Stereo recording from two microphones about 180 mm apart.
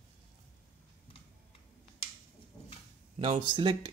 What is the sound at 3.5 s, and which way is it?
Speech, 25° right (ahead or behind).